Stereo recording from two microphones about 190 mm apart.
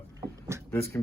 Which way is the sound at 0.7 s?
10° left (ahead or behind).